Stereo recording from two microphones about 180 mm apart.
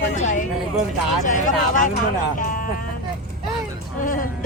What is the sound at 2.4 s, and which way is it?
Music, 50° left (ahead or behind).